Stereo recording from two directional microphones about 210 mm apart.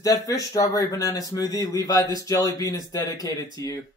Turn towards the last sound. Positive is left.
turn(degrees=15)  # may be behind; listen again after turning